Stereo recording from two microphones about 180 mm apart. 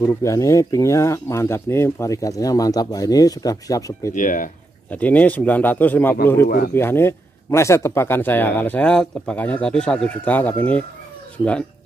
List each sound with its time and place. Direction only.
0.0 s speech: 15° left (ahead or behind)
4.1 s speech: 45° left (ahead or behind)
4.9 s speech: 10° left (ahead or behind)
6.4 s speech: 60° left (ahead or behind)
6.7 s speech: 10° left (ahead or behind)